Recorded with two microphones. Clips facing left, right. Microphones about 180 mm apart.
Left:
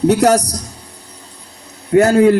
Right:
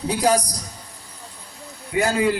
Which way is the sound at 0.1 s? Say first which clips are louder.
Left 4 dB; 75° left (ahead or behind).